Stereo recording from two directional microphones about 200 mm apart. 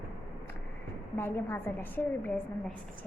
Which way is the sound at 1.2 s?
10° left (ahead or behind).